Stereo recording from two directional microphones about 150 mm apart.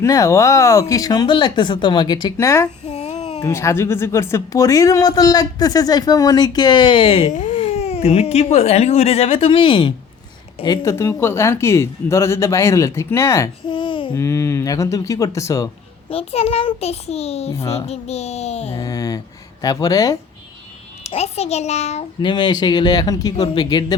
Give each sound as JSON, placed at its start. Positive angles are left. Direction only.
{"t": 0.0, "sound": "speech", "side_deg": 20}
{"t": 2.9, "sound": "a sound", "side_deg": 45}
{"t": 3.4, "sound": "speech", "side_deg": 20}
{"t": 7.3, "sound": "speech", "side_deg": 55}
{"t": 10.8, "sound": "speech", "side_deg": 20}
{"t": 13.7, "sound": "babbling", "side_deg": 30}
{"t": 14.2, "sound": "speech", "side_deg": 20}
{"t": 16.0, "sound": "a child's voice", "side_deg": 40}
{"t": 17.5, "sound": "speech", "side_deg": 20}
{"t": 17.7, "sound": "a child's voice", "side_deg": 45}
{"t": 18.8, "sound": "speech", "side_deg": 25}
{"t": 21.0, "sound": "a child's voice", "side_deg": 45}
{"t": 22.2, "sound": "speech", "side_deg": 30}